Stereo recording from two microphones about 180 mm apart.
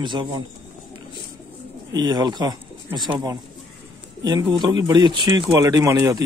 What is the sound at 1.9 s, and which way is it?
Speech, 20° right (ahead or behind).